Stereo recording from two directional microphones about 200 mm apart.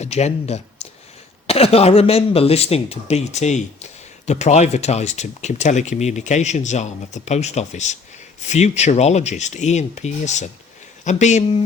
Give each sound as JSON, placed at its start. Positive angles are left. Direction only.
{"t": 0.0, "sound": "speech", "side_deg": 35}